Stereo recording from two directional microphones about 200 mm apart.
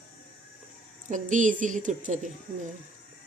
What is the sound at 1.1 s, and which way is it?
A woman's voice, 40° right (ahead or behind).